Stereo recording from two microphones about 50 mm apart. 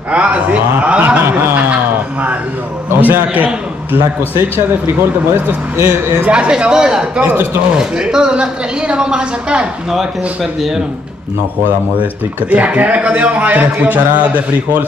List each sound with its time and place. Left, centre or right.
0.1 s speech: right
0.8 s a sound: right
3.1 s a man's voice: right
6.3 s speech: right
9.8 s speech: centre
12.4 s a man's voice: right